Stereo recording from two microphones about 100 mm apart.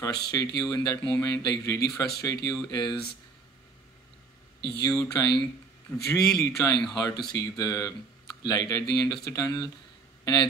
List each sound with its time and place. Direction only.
0.0 s speech: 40° left (ahead or behind)
4.8 s speech: 40° left (ahead or behind)